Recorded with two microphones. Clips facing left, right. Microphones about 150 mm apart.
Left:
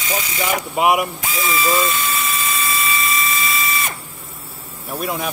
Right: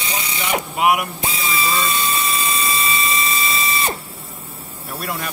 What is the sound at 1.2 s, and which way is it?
Squeal, 30° right (ahead or behind).